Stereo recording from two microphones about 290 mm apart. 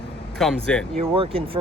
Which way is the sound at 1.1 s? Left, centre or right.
Centre.